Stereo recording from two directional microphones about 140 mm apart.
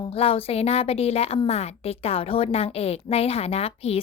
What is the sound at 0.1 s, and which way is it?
A woman's voice, 45° left (ahead or behind).